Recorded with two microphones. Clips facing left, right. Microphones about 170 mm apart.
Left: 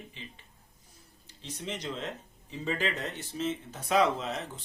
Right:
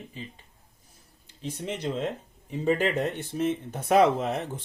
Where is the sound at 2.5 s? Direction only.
55° right (ahead or behind).